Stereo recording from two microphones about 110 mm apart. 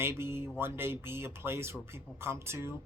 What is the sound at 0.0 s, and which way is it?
Speech, 25° right (ahead or behind).